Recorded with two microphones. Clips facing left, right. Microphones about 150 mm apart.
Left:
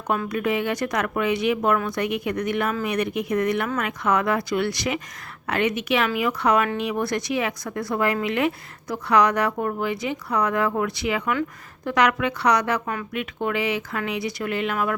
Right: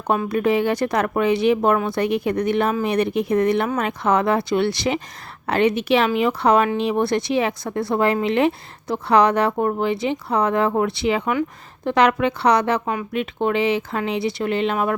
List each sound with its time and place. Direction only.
0.1 s a woman's voice: 30° right (ahead or behind)